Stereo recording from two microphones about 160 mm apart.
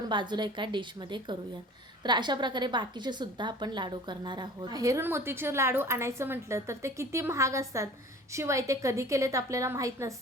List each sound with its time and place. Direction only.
0.1 s a woman's voice: 30° right (ahead or behind)